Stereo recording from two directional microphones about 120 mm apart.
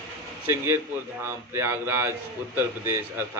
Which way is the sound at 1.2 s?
20° right (ahead or behind).